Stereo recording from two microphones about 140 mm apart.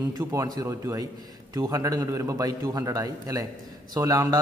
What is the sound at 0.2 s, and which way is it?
Speech, 25° right (ahead or behind).